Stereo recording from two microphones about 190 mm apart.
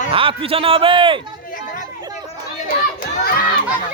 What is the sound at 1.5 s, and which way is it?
Chatter, 45° left (ahead or behind).